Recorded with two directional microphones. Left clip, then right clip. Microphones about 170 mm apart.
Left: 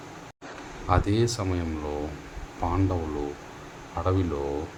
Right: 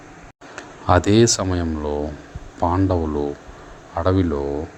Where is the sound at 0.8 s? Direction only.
45° right (ahead or behind).